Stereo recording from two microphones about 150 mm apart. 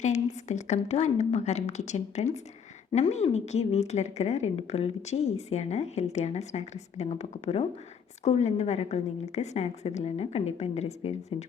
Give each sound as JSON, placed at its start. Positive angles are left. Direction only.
{"t": 0.0, "sound": "a woman's voice", "side_deg": 50}